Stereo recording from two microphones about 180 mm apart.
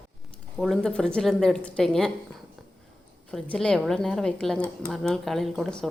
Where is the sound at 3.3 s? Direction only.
5° left (ahead or behind).